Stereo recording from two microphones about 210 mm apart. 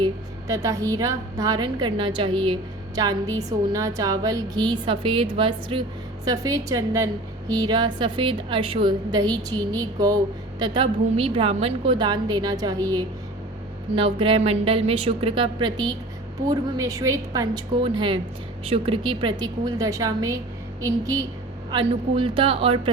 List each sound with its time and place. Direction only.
0.0 s a woman's voice: 15° right (ahead or behind)